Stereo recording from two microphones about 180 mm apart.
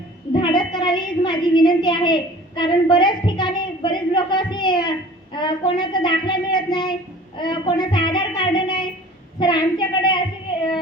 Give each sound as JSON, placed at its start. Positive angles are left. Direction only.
{"t": 0.3, "sound": "a woman's voice", "side_deg": 25}